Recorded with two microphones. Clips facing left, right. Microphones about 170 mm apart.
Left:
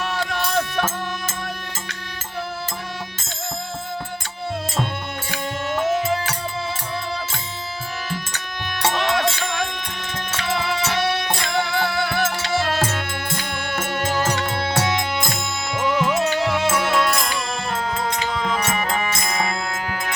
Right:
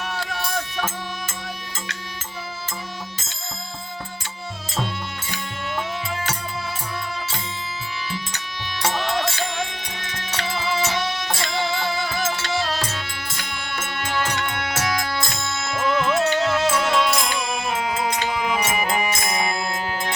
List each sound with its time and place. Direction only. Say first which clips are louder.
0.3 s a sound: left 5 dB; 75° left (ahead or behind)
5.7 s music: left 8 dB; 45° left (ahead or behind)
8.9 s music: left 3 dB; 70° left (ahead or behind)
10.1 s music: left 3 dB; 55° left (ahead or behind); by 19.5 s 20° right (ahead or behind)